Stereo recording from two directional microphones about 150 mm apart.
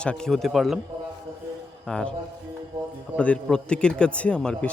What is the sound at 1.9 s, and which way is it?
Speech, 5° left (ahead or behind).